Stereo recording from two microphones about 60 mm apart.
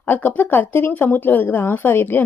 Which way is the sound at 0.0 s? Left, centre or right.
Left.